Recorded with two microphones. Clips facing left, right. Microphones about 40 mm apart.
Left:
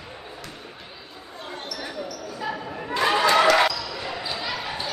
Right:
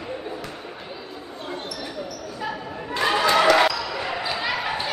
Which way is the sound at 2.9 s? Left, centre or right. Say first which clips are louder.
Left 1 dB; centre.